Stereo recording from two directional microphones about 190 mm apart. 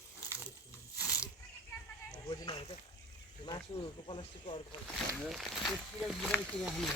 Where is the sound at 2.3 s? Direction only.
25° left (ahead or behind).